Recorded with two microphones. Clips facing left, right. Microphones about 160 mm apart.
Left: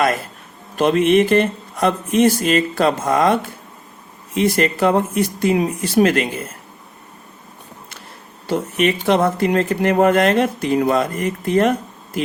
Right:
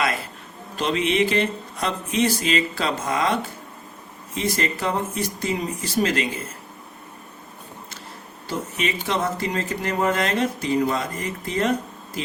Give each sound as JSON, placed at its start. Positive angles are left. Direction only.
{"t": 0.8, "sound": "speech", "side_deg": 55}
{"t": 4.4, "sound": "speech", "side_deg": 60}
{"t": 8.4, "sound": "speech", "side_deg": 60}